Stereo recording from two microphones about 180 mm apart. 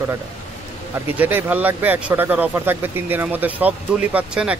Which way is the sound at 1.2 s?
10° right (ahead or behind).